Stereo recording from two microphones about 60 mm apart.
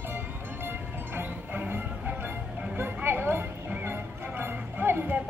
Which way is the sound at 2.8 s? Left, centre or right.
Right.